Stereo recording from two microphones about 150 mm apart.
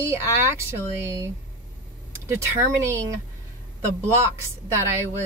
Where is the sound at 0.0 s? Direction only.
15° right (ahead or behind).